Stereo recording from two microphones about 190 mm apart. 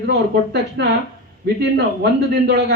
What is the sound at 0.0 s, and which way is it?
A man's voice, 60° right (ahead or behind).